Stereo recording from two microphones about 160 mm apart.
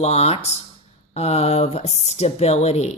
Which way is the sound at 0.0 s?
40° left (ahead or behind).